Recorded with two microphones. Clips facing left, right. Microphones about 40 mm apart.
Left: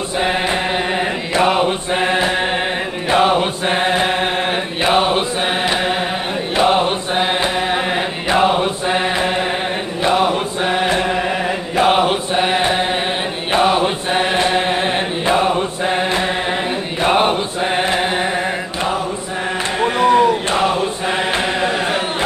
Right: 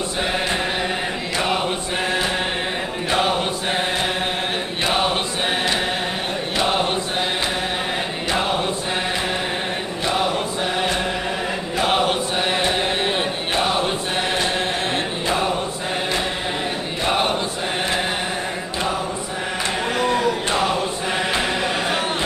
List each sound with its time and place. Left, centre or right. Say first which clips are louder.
1.3 s chant: left 7 dB; left
3.1 s chant: left 7 dB; left
4.8 s chant: left 6 dB; centre
6.6 s chant: left 7 dB; centre
10.0 s chant: left 6 dB; left
11.7 s chant: left 5 dB; left
13.5 s chant: left 8 dB; left
17.0 s chant: left 6 dB; left
19.8 s chant: left 9 dB; left